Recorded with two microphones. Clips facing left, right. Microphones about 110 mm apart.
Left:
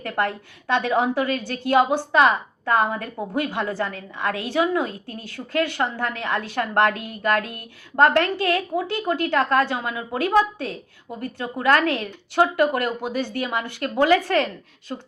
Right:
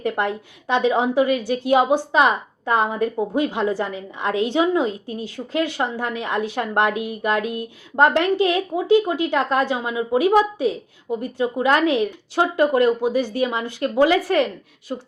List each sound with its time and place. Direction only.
0.0 s a woman's voice: 15° right (ahead or behind)